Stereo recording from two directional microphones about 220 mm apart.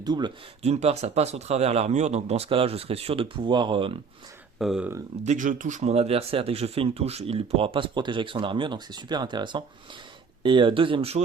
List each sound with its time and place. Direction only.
0.0 s speech: 20° right (ahead or behind)
4.5 s speech: centre (ahead or behind)
5.2 s speech: 35° right (ahead or behind)